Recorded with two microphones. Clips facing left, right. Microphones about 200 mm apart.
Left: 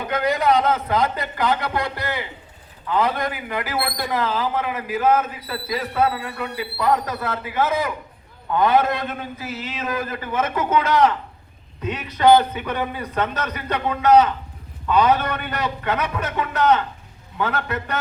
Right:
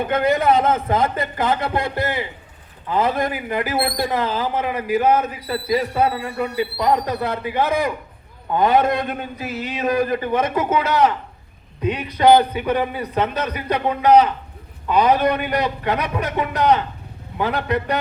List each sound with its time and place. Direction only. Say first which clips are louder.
0.1 s a man's voice: right 1 dB; 25° right (ahead or behind)